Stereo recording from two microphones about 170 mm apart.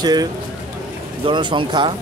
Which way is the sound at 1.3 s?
30° right (ahead or behind).